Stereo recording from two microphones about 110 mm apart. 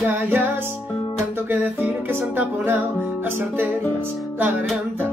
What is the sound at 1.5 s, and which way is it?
Music, 15° right (ahead or behind).